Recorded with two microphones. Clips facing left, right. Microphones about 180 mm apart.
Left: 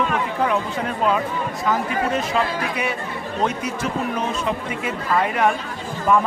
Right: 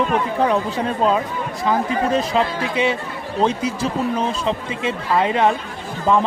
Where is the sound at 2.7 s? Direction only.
25° right (ahead or behind).